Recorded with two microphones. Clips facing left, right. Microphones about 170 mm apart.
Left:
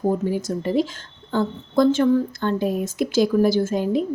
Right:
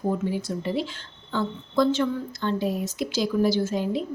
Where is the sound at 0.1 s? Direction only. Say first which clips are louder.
Left 4 dB; 45° left (ahead or behind).